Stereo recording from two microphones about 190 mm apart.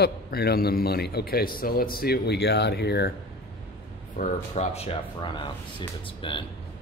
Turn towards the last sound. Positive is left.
turn(degrees=25)  # may be behind; listen again after turning